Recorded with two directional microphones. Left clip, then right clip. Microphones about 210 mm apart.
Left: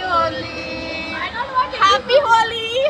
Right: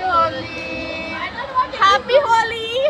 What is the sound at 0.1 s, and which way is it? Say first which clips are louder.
Music: even; 5° right (ahead or behind).